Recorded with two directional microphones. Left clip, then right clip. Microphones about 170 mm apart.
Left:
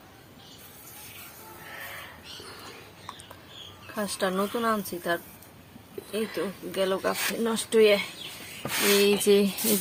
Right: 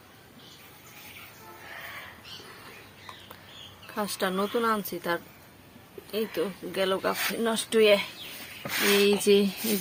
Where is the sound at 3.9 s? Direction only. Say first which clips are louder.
Left 1 dB; 15° right (ahead or behind).